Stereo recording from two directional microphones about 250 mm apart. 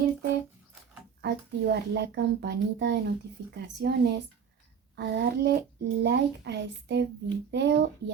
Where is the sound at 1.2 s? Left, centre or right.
Right.